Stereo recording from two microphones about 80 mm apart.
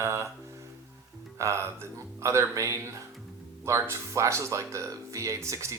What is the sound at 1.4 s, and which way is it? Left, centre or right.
Speech, right.